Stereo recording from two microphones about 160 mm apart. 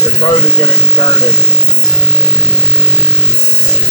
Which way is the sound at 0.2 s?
35° left (ahead or behind).